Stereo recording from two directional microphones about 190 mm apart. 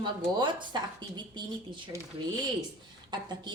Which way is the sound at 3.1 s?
25° right (ahead or behind).